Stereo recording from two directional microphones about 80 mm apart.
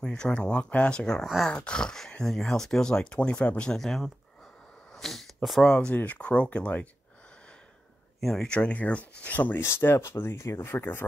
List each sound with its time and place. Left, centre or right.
0.0 s speech: centre
1.2 s speech: centre
1.5 s speech: centre
4.9 s a sound: centre
5.7 s speech: centre
8.2 s speech: centre
8.5 s speech: centre
9.6 s speech: left